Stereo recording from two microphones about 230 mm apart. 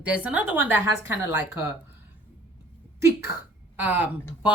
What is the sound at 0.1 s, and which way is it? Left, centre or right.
A woman's voice, centre.